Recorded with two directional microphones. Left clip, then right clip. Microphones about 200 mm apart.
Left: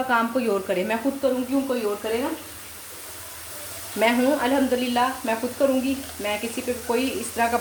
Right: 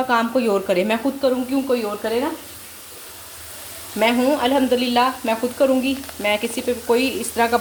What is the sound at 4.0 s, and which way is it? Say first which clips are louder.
Speech: right 3 dB; 30° right (ahead or behind).